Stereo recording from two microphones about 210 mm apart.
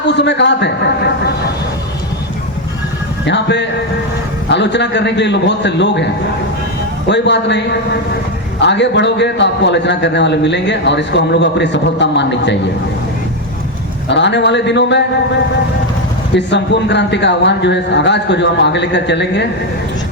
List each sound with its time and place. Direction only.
0.1 s a man's voice: 55° left (ahead or behind)
3.2 s a man's voice: 55° left (ahead or behind)
7.1 s a man's voice: 55° left (ahead or behind)
8.6 s a man's voice: 55° left (ahead or behind)
14.1 s a man's voice: 55° left (ahead or behind)
16.3 s a man's voice: 55° left (ahead or behind)